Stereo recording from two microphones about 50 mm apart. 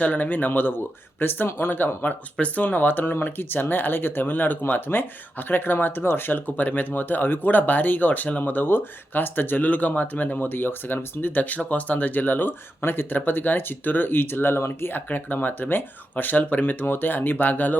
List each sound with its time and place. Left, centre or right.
0.0 s speech: left